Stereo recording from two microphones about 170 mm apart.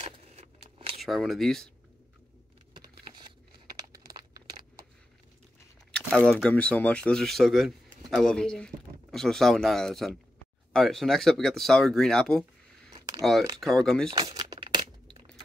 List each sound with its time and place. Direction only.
0.0 s a sound: 40° right (ahead or behind)
1.0 s speech: centre (ahead or behind)
3.9 s crumpling: 20° right (ahead or behind)
6.4 s speech: 5° left (ahead or behind)
12.9 s a sound: 20° right (ahead or behind)
13.2 s speech: centre (ahead or behind)
14.1 s crumpling: 25° right (ahead or behind)